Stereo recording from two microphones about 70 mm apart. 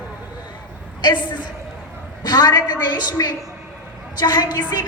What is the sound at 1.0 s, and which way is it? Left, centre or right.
A man's voice, left.